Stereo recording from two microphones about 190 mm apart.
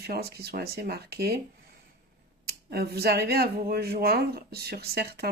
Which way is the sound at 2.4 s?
55° right (ahead or behind).